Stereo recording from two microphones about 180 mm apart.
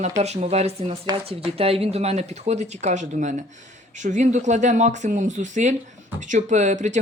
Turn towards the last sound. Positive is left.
turn(degrees=-40)  # may be behind; listen again after turning